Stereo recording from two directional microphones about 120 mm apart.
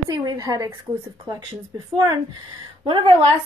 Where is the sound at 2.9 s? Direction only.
45° right (ahead or behind).